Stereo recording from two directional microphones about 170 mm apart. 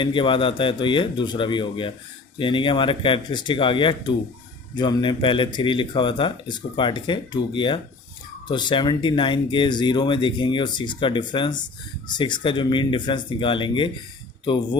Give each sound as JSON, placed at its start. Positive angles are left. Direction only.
{"t": 0.0, "sound": "speech", "side_deg": 30}